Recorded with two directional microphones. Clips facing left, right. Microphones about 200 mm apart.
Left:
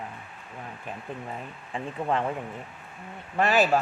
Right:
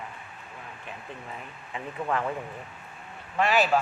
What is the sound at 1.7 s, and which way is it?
Speech, 25° left (ahead or behind).